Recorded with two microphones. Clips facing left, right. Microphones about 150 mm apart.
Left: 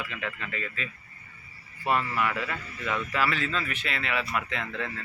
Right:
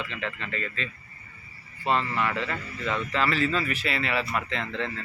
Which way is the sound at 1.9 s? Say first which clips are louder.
Right 1 dB; 20° right (ahead or behind).